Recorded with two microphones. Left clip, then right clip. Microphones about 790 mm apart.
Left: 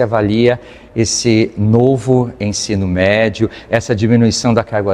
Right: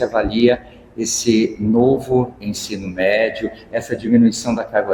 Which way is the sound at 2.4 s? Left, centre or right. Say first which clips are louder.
Left 8 dB; left.